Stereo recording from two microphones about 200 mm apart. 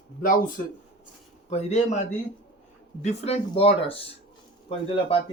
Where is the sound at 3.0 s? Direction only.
30° left (ahead or behind).